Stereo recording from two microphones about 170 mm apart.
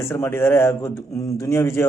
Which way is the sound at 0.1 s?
15° left (ahead or behind).